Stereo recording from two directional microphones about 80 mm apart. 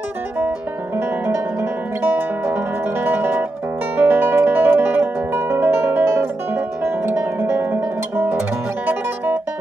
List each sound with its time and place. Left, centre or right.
0.9 s zither: right
3.9 s music: right